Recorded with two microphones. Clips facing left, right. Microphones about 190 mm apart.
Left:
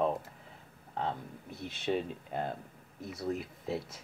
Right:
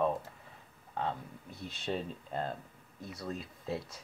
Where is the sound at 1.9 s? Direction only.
10° left (ahead or behind).